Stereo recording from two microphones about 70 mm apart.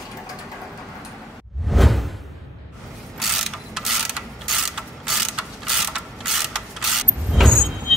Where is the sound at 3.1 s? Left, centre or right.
Centre.